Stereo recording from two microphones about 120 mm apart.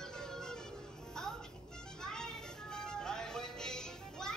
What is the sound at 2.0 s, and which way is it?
Music, 5° left (ahead or behind).